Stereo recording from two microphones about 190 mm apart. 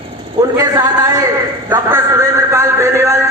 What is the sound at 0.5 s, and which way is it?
A man's voice, 20° right (ahead or behind).